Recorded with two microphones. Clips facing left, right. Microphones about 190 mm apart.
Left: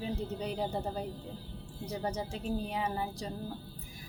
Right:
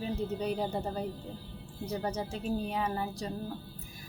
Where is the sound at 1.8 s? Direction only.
15° left (ahead or behind).